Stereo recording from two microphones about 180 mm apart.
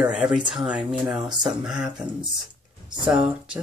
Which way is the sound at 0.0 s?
5° right (ahead or behind).